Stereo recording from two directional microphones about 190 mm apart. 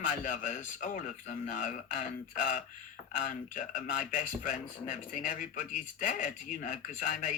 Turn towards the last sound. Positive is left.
turn(degrees=40)  # may be behind; listen again after turning